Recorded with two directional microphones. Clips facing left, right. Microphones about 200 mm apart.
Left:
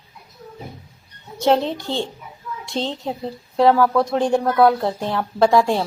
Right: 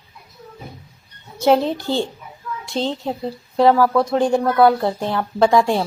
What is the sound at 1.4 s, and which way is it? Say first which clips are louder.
A woman's voice: right 2 dB; 5° right (ahead or behind).